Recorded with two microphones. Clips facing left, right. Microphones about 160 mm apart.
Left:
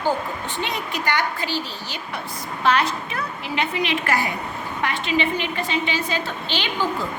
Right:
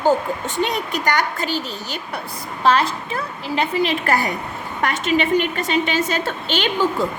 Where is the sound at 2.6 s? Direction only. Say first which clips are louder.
Right 3 dB; 30° right (ahead or behind).